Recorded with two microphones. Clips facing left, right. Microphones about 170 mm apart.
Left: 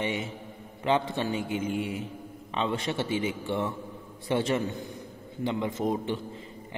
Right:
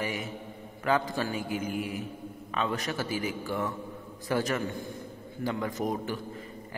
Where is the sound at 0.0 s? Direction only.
25° left (ahead or behind).